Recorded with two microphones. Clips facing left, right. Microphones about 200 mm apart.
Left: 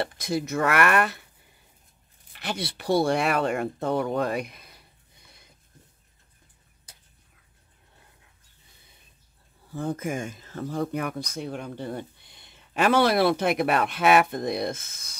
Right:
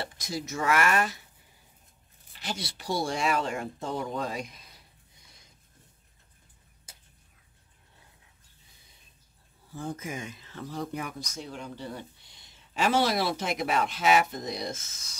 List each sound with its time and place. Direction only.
0.0 s speech: 60° left (ahead or behind)
2.3 s speech: 60° left (ahead or behind)
9.7 s speech: 60° left (ahead or behind)